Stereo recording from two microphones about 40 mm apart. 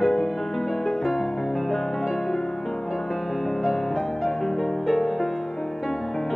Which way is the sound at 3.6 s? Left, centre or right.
Centre.